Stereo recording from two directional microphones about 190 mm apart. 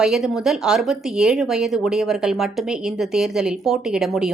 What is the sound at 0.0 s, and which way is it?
Speech, centre (ahead or behind).